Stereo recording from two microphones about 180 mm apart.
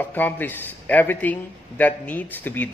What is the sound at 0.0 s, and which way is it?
A man's voice, 10° left (ahead or behind).